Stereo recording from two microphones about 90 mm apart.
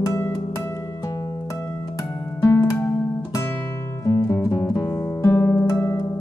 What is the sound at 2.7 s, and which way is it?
Music, 35° left (ahead or behind).